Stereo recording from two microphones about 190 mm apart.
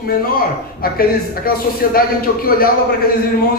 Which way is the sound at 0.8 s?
50° left (ahead or behind).